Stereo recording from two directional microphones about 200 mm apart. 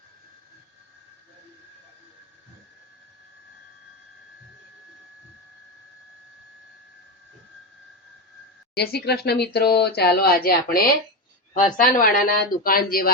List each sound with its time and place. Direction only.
8.7 s speech: 55° left (ahead or behind)